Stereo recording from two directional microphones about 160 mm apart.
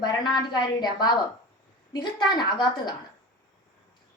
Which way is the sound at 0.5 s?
25° left (ahead or behind).